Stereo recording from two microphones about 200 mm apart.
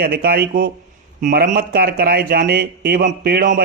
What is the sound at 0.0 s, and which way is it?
Speech, 50° right (ahead or behind).